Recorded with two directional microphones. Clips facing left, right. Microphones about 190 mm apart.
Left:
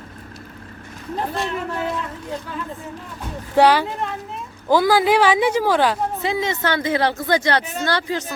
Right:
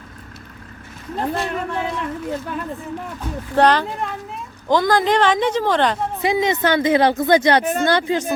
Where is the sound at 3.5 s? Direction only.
10° left (ahead or behind).